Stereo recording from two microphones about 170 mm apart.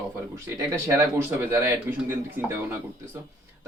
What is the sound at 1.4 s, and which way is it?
Speech, 10° right (ahead or behind).